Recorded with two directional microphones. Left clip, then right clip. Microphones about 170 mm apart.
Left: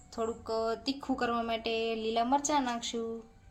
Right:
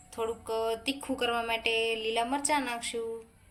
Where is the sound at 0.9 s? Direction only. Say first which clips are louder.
Right 2 dB; 50° left (ahead or behind).